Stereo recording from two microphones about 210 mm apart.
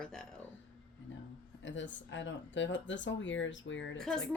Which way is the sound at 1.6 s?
60° left (ahead or behind).